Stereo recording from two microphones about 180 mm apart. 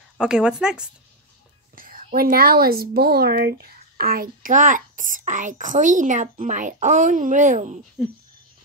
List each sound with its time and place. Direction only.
0.2 s speech: 5° right (ahead or behind)
1.8 s speech: 50° right (ahead or behind)